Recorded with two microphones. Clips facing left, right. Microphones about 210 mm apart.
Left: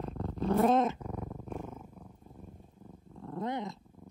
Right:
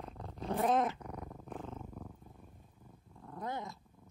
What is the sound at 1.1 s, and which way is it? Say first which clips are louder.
Purr: left 5 dB; 5° left (ahead or behind).